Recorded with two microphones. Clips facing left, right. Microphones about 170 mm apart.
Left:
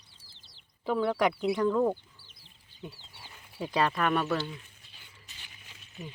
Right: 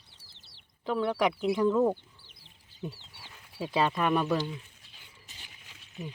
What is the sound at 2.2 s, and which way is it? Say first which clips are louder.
Chicken: right 1 dB; 70° right (ahead or behind).